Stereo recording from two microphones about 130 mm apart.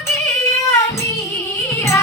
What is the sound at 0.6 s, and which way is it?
Child singing, 20° left (ahead or behind).